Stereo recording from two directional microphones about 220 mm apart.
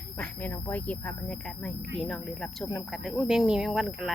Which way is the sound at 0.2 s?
5° left (ahead or behind).